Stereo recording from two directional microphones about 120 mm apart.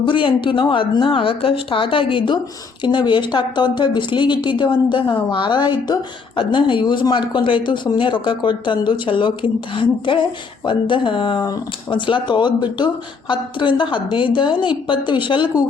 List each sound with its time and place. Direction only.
0.0 s speech: 45° left (ahead or behind)